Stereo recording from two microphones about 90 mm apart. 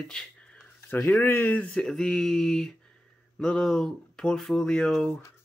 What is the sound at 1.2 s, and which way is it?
Speech, 25° left (ahead or behind).